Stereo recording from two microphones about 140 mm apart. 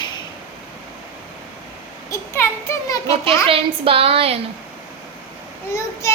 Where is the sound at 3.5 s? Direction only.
40° right (ahead or behind).